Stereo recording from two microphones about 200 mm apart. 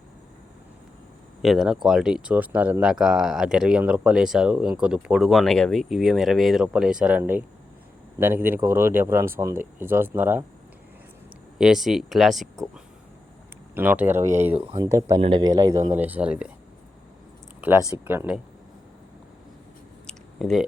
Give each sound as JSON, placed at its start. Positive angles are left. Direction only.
{"t": 1.4, "sound": "speech", "side_deg": 0}
{"t": 11.5, "sound": "speech", "side_deg": -5}
{"t": 17.6, "sound": "speech", "side_deg": -15}
{"t": 20.1, "sound": "a sound", "side_deg": 0}